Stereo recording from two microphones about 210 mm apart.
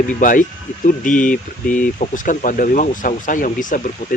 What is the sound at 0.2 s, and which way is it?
Speech, 40° left (ahead or behind).